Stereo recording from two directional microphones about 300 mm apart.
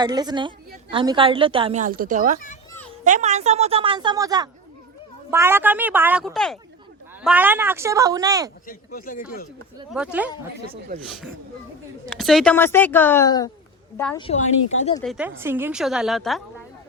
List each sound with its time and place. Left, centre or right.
0.0 s a woman's voice: centre
8.6 s a woman's voice: left
9.9 s a woman's voice: centre
12.0 s a woman's voice: centre; by 14.9 s left
15.0 s a woman's voice: centre